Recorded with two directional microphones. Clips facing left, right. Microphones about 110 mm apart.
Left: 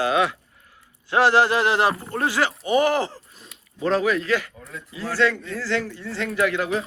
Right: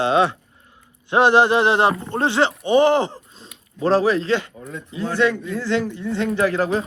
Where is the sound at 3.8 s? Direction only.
35° right (ahead or behind).